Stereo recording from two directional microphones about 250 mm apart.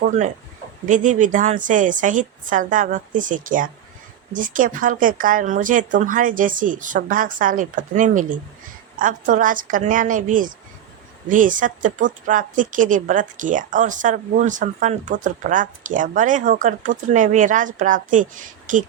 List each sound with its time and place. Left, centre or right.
0.0 s a man's voice: right